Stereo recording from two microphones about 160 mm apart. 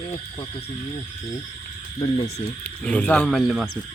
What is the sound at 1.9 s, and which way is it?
Speech, 30° left (ahead or behind).